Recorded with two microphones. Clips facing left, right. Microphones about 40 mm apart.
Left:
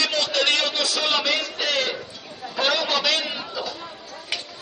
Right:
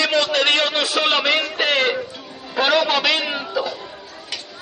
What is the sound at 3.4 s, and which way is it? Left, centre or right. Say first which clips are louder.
Music: right 6 dB; centre.